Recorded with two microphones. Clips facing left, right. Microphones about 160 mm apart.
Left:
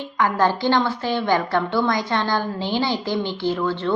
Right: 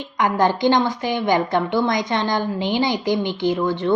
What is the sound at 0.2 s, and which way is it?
A woman's voice, 15° right (ahead or behind).